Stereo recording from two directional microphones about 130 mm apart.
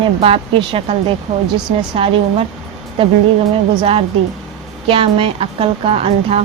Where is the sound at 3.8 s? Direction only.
45° right (ahead or behind).